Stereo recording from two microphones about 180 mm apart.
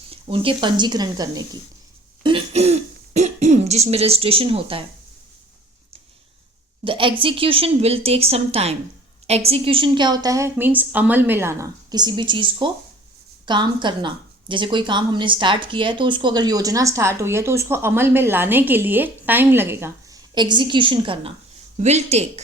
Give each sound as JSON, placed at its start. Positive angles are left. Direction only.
{"t": 0.1, "sound": "speech", "side_deg": -30}
{"t": 2.2, "sound": "cough", "side_deg": -30}
{"t": 6.8, "sound": "a woman's voice", "side_deg": -30}
{"t": 21.8, "sound": "a woman's voice", "side_deg": -40}